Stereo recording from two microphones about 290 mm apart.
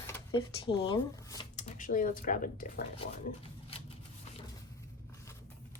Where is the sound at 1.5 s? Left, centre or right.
Left.